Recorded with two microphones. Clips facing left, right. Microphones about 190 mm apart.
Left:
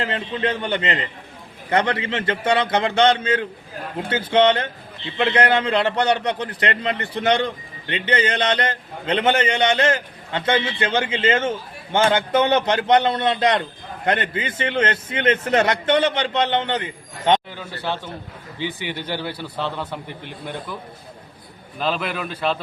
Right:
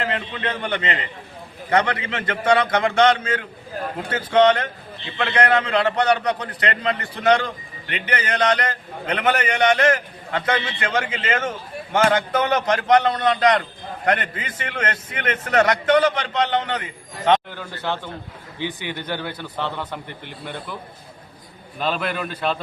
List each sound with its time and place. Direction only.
0.0 s a man's voice: 30° left (ahead or behind)
17.5 s speech: 10° left (ahead or behind)
21.8 s a man's voice: centre (ahead or behind)